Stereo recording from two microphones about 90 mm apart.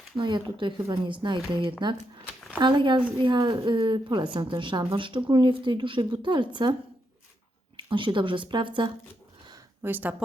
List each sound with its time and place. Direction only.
0.2 s a woman's voice: 60° right (ahead or behind)
7.9 s speech: 65° right (ahead or behind)
9.8 s speech: 20° right (ahead or behind)